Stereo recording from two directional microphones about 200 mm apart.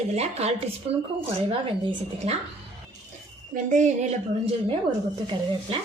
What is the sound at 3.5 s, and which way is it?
A woman's voice, 40° right (ahead or behind).